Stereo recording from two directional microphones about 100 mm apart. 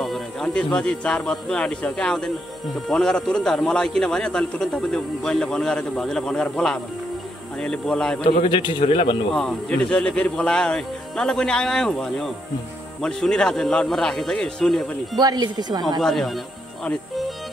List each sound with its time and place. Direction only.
0.0 s a man's voice: 5° left (ahead or behind)
8.5 s a man's voice: 55° left (ahead or behind)
9.3 s a man's voice: 5° left (ahead or behind)
15.1 s speech: 40° right (ahead or behind)
16.0 s speech: 5° left (ahead or behind)